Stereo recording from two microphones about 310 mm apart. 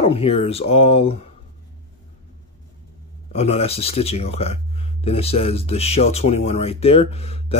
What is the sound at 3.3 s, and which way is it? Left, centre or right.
Speech, centre.